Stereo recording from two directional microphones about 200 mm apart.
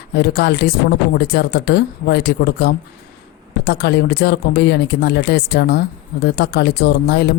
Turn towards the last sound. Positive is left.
turn(degrees=55)  # may be behind; listen again after turning